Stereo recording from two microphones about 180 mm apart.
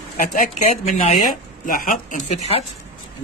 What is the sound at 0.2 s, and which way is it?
A man's voice, 40° left (ahead or behind).